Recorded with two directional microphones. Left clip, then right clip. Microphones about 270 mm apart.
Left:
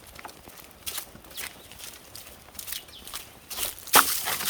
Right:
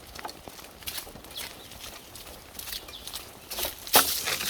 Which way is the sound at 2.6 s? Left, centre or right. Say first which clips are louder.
Right 1 dB; centre.